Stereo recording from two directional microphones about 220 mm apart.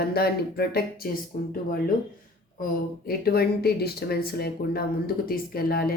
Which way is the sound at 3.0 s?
45° left (ahead or behind).